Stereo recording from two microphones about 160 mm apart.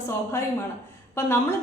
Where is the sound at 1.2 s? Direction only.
15° left (ahead or behind).